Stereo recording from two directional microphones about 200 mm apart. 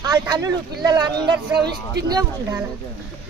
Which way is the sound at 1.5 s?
55° right (ahead or behind).